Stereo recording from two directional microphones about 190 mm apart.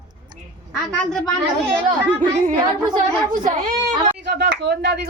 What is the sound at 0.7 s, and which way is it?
Speech, centre (ahead or behind).